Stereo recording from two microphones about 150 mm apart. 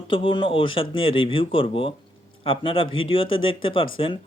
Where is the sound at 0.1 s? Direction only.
35° left (ahead or behind).